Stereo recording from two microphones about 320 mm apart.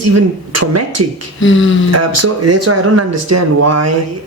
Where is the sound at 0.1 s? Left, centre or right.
Right.